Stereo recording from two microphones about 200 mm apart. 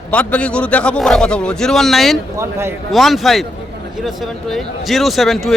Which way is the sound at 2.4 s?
15° right (ahead or behind).